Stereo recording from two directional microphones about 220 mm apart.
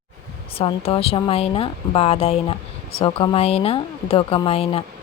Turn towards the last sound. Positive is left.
turn(degrees=25)  # may be behind; listen again after turning